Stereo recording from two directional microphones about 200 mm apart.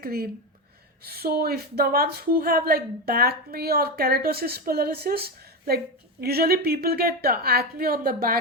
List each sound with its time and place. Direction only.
0.0 s speech: 50° right (ahead or behind)